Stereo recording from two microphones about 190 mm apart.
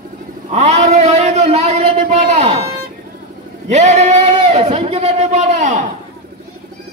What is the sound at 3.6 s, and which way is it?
A man's voice, 35° right (ahead or behind).